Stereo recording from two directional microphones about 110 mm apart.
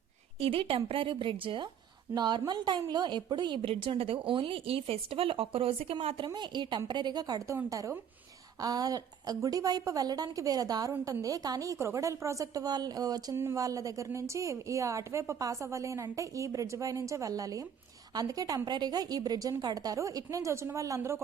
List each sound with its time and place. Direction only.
0.3 s a woman's voice: 55° right (ahead or behind)
2.1 s a woman's voice: 40° right (ahead or behind); by 6.2 s 60° right (ahead or behind)
6.2 s a woman's voice: 45° right (ahead or behind)
13.3 s a woman's voice: 25° right (ahead or behind)